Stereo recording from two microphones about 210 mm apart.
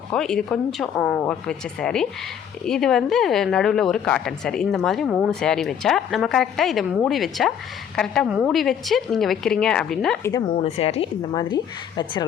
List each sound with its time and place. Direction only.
0.1 s a woman's voice: 5° left (ahead or behind)
10.3 s a woman's voice: 25° left (ahead or behind)